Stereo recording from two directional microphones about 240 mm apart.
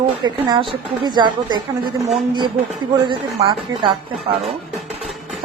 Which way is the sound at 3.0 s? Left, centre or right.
Right.